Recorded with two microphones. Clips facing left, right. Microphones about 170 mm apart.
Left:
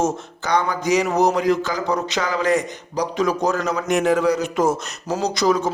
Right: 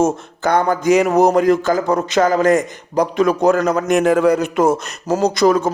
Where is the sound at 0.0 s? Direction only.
50° right (ahead or behind).